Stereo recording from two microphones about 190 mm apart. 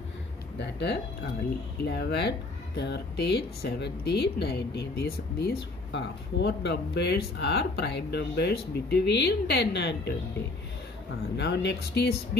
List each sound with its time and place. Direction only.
0.6 s speech: 65° left (ahead or behind)
11.3 s speech: 65° left (ahead or behind)